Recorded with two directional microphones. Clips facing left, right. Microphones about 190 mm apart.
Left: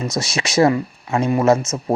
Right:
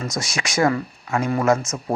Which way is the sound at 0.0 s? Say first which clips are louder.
Left 4 dB; 25° left (ahead or behind).